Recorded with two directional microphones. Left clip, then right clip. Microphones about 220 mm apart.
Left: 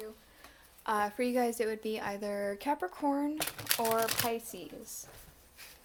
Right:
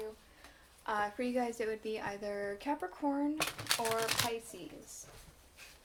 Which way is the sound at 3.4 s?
10° left (ahead or behind).